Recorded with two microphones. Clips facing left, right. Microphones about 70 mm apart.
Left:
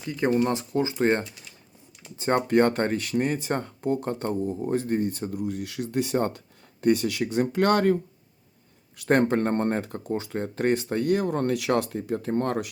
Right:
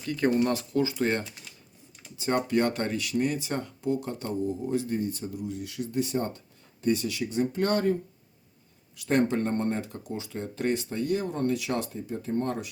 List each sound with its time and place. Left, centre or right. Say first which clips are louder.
0.0 s speech: left 1 dB; centre; by 7.9 s left
9.0 s speech: left 3 dB; left